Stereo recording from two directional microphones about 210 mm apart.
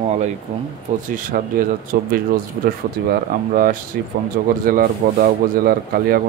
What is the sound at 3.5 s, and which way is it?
Speech, 40° right (ahead or behind).